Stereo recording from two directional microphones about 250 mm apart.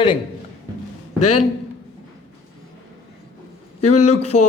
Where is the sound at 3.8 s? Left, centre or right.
Left.